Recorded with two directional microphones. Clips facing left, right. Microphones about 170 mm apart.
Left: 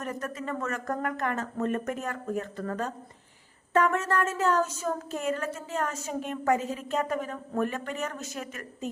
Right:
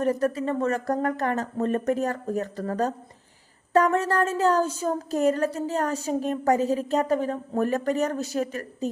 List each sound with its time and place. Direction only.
0.0 s a woman's voice: 35° right (ahead or behind)